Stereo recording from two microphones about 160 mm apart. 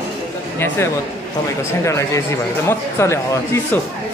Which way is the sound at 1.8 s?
20° left (ahead or behind).